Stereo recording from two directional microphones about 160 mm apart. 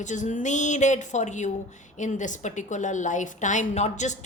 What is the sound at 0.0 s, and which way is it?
A woman's voice, 50° left (ahead or behind).